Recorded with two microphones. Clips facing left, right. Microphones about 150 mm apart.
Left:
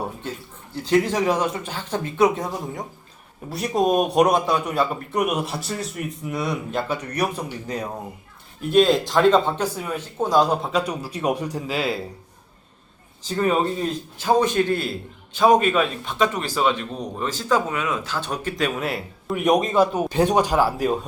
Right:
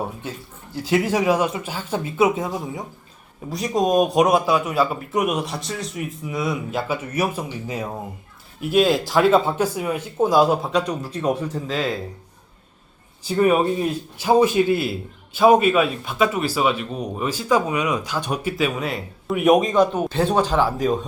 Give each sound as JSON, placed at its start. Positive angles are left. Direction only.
{"t": 0.9, "sound": "a man's voice", "side_deg": -10}
{"t": 8.7, "sound": "a man's voice", "side_deg": -5}
{"t": 13.2, "sound": "a man's voice", "side_deg": -10}